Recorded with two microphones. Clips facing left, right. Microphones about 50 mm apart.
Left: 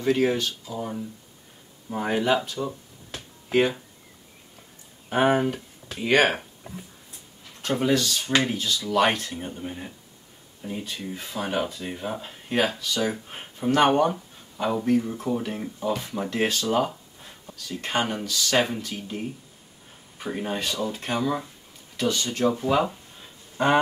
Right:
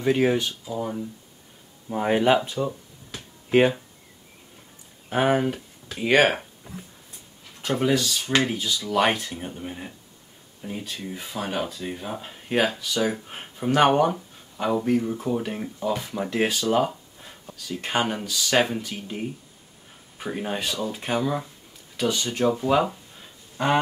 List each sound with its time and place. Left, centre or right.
0.0 s speech: centre
0.7 s speech: centre
2.0 s speech: right
5.1 s speech: centre
7.6 s speech: centre
12.2 s speech: centre